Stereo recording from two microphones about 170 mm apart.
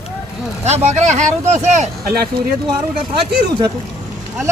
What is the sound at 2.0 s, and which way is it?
Speech, 65° right (ahead or behind).